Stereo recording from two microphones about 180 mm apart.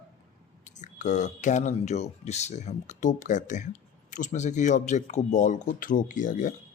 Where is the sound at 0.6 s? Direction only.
40° left (ahead or behind).